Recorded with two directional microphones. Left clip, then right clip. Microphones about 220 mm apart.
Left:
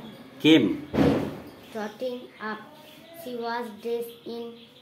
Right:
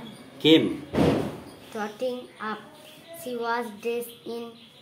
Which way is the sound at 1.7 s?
30° right (ahead or behind).